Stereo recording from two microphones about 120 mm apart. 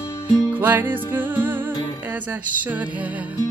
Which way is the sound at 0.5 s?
15° right (ahead or behind).